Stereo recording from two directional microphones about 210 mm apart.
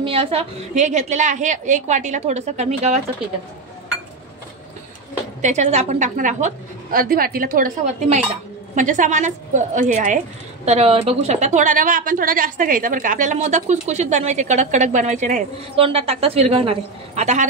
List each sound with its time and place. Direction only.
0.0 s a woman's voice: 25° right (ahead or behind)
5.4 s a woman's voice: 35° right (ahead or behind)